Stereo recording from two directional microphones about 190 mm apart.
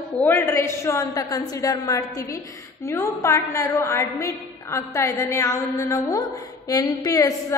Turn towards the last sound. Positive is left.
turn(degrees=15)  # may be behind; listen again after turning